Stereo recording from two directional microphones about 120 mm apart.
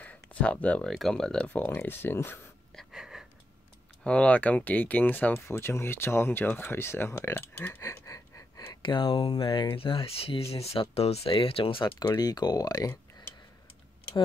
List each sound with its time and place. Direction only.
0.0 s a sound: 10° left (ahead or behind)
0.9 s speech: 5° left (ahead or behind)
2.7 s wheeze: centre (ahead or behind)
4.0 s speech: 10° left (ahead or behind); by 8.7 s 25° left (ahead or behind)
8.8 s speech: 45° left (ahead or behind)